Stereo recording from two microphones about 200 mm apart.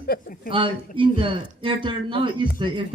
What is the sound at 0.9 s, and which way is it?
Speech, 25° right (ahead or behind).